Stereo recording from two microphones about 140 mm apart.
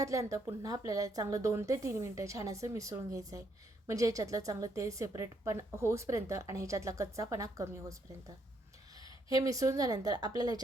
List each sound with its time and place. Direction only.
0.0 s a woman's voice: 25° right (ahead or behind)
9.0 s a woman's voice: 25° right (ahead or behind)